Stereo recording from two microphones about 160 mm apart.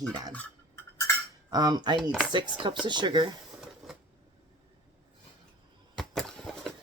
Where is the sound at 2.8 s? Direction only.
30° right (ahead or behind).